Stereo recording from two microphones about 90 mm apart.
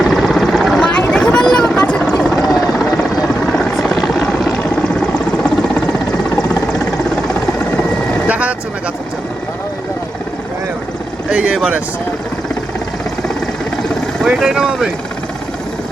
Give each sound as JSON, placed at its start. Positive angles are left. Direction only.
{"t": 0.0, "sound": "helicopter", "side_deg": 0}
{"t": 0.9, "sound": "a sound", "side_deg": 15}
{"t": 2.5, "sound": "helicopter", "side_deg": 40}
{"t": 3.8, "sound": "vehicle", "side_deg": 5}
{"t": 8.3, "sound": "vehicle", "side_deg": -15}
{"t": 11.3, "sound": "vehicle", "side_deg": -10}
{"t": 14.3, "sound": "speech", "side_deg": -5}